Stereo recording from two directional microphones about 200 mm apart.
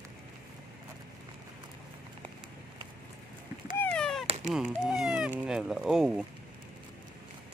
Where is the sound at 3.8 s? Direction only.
5° left (ahead or behind).